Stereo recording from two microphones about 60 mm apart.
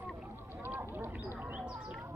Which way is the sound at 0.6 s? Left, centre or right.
Right.